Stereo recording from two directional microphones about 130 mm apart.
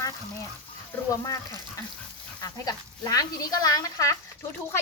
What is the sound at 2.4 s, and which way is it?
Speech, 30° left (ahead or behind).